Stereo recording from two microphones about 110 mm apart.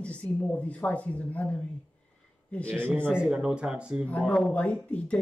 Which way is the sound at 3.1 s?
5° right (ahead or behind).